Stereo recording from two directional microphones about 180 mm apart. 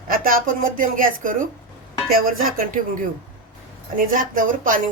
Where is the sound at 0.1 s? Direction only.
50° right (ahead or behind).